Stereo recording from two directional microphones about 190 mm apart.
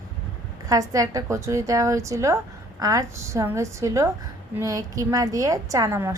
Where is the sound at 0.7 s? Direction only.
20° right (ahead or behind).